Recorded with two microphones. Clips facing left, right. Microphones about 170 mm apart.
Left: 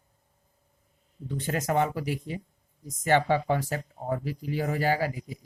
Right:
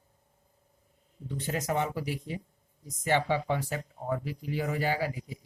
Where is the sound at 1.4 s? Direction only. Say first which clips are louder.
Left 4 dB; 55° left (ahead or behind).